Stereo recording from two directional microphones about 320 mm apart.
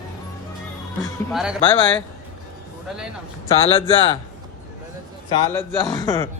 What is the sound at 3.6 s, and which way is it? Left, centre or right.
Speech, centre.